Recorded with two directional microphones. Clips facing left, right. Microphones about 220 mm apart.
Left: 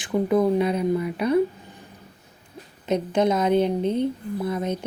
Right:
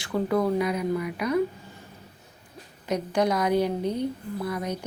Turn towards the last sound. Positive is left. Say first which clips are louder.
# left 4 dB
turn(degrees=25)  # may be behind; listen again after turning